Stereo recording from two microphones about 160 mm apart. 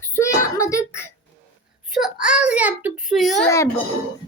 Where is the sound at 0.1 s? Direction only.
20° left (ahead or behind).